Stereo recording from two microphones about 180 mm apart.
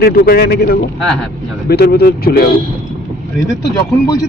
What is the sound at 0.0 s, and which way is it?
Speech, 60° left (ahead or behind).